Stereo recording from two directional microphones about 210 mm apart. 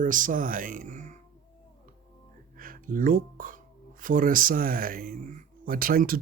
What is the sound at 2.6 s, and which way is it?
Speech, 40° right (ahead or behind).